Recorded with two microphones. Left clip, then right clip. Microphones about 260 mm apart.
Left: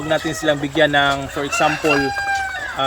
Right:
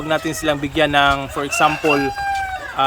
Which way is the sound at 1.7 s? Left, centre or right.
Right.